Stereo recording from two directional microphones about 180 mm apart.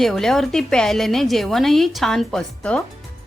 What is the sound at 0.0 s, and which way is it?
A woman's voice, centre (ahead or behind).